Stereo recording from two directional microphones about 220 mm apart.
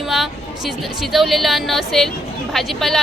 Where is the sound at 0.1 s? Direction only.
Centre (ahead or behind).